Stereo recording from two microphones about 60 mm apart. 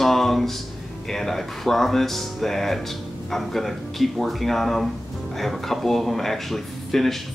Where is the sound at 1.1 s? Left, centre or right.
Centre.